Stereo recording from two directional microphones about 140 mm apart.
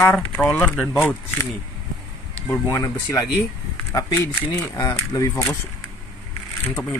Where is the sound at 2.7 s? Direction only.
25° left (ahead or behind).